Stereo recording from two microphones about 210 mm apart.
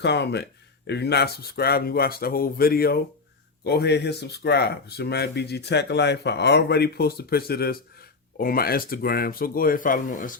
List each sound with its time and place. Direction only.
0.0 s speech: 55° left (ahead or behind)